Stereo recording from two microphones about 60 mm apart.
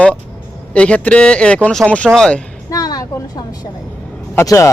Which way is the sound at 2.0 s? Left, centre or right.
Centre.